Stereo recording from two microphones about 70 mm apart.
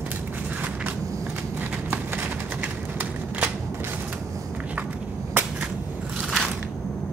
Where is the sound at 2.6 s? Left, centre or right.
Right.